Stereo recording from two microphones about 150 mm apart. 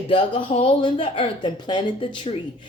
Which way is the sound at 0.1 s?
35° left (ahead or behind).